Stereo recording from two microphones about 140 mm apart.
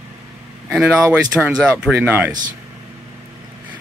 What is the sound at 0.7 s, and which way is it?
Speech, 5° right (ahead or behind).